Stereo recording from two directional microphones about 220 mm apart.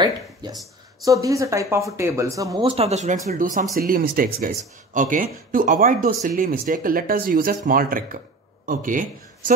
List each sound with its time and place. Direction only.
0.0 s a man's voice: 20° right (ahead or behind); by 9.5 s 40° right (ahead or behind)